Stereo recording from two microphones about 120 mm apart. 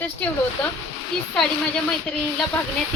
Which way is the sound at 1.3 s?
10° left (ahead or behind).